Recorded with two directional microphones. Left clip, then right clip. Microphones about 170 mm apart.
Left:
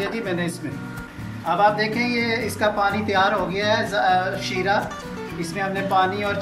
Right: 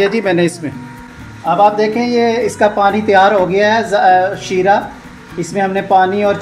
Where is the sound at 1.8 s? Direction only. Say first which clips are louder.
Right 9 dB; 50° right (ahead or behind).